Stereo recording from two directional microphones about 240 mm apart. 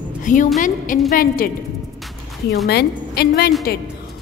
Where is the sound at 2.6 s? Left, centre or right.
Left.